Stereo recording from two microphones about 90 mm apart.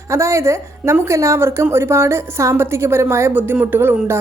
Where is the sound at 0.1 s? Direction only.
35° right (ahead or behind).